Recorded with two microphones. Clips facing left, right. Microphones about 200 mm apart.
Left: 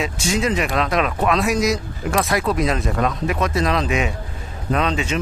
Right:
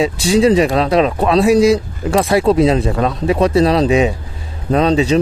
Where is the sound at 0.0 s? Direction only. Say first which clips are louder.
Right 9 dB; 35° right (ahead or behind).